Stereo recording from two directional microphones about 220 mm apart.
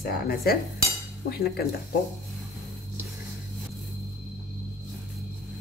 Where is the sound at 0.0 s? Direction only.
40° left (ahead or behind).